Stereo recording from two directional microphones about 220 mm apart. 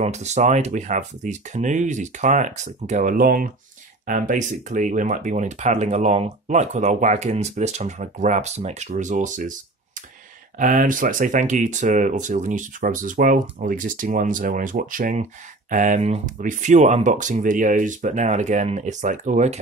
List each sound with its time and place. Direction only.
0.0 s speech: 30° right (ahead or behind)
10.6 s speech: 35° right (ahead or behind)